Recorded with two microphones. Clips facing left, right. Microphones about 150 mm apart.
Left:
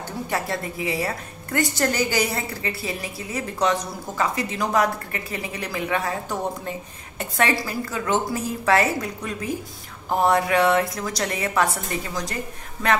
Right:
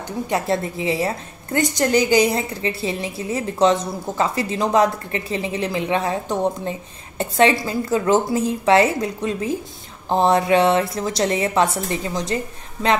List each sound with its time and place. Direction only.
0.3 s a woman's voice: 25° right (ahead or behind)